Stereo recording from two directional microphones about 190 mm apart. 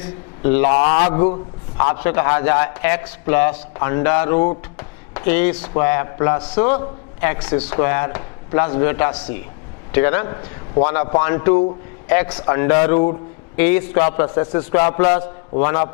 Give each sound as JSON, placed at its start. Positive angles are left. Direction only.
{"t": 0.0, "sound": "a man's voice", "side_deg": 15}
{"t": 0.9, "sound": "speech", "side_deg": 30}
{"t": 1.8, "sound": "a man's voice", "side_deg": 15}
{"t": 15.0, "sound": "a man's voice", "side_deg": 45}
{"t": 15.6, "sound": "a man's voice", "side_deg": 15}